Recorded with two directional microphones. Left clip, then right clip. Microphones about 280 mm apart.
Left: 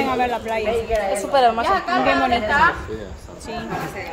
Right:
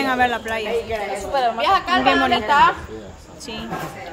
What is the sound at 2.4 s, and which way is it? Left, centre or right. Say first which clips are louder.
Speech: right 3 dB; right.